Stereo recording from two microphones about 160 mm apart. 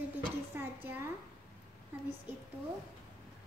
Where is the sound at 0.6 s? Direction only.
15° right (ahead or behind).